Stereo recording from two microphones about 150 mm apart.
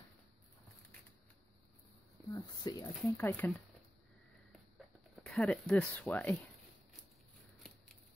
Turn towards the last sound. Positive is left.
turn(degrees=10)  # may be behind; listen again after turning